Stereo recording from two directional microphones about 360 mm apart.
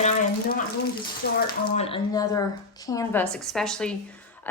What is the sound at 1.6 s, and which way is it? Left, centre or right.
A woman's voice, centre.